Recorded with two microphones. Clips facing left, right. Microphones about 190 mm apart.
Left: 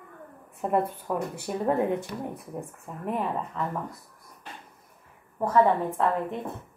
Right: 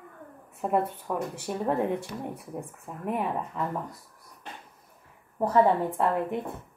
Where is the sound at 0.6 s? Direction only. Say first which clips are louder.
Left 1 dB; centre (ahead or behind).